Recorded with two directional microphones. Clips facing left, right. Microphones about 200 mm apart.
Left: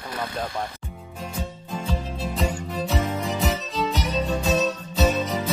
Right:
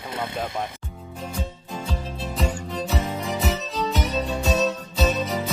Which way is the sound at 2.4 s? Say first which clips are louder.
Even; centre (ahead or behind).